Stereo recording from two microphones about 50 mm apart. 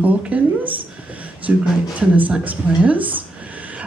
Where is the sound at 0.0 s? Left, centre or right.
Right.